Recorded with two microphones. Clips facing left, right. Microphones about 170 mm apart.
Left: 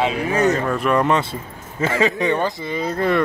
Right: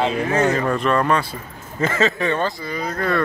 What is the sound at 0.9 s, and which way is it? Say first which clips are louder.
Speech: left 1 dB; 20° left (ahead or behind).